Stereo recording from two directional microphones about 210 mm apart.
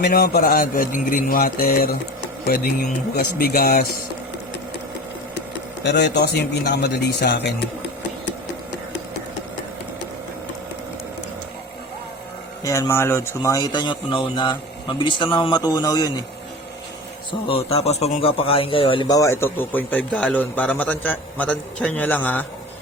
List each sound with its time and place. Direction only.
0.0 s a man's voice: 50° left (ahead or behind)
5.8 s a man's voice: 55° left (ahead or behind)
12.6 s speech: 15° left (ahead or behind)
17.5 s speech: 30° left (ahead or behind); by 22.4 s 5° left (ahead or behind)